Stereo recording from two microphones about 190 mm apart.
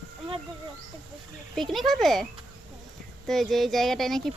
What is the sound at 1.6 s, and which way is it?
Speech, centre (ahead or behind).